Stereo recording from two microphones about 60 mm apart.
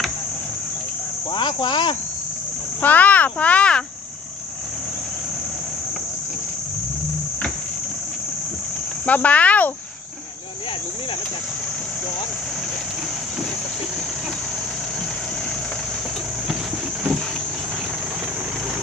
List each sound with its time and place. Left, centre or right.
2.8 s a child's voice: left
9.0 s speech: left